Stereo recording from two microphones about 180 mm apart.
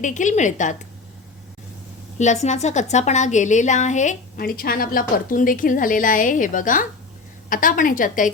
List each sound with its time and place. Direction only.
0.0 s a woman's voice: 45° left (ahead or behind)
2.1 s a woman's voice: 40° left (ahead or behind)